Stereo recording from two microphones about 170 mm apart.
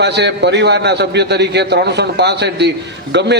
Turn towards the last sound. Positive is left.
turn(degrees=-90)